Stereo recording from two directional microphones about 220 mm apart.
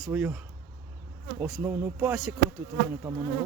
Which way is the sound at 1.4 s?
5° right (ahead or behind).